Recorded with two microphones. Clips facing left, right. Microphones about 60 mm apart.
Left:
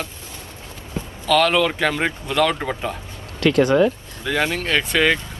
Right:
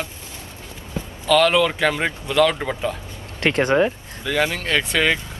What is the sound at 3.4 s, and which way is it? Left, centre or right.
Speech, right.